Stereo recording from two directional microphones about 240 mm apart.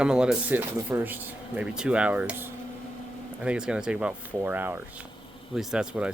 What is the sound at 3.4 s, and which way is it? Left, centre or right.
Speech, centre.